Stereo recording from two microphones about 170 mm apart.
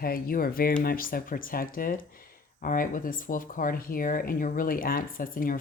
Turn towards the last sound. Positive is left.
turn(degrees=55)  # may be behind; listen again after turning